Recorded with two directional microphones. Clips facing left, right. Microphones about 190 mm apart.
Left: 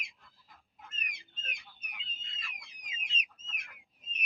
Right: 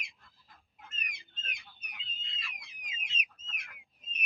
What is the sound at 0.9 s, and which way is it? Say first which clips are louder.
Fowl: right 1 dB; 45° left (ahead or behind).